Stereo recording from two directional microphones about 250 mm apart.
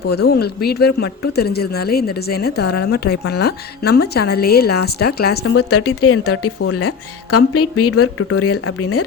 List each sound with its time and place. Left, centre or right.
0.1 s a woman's voice: left
5.5 s speech: left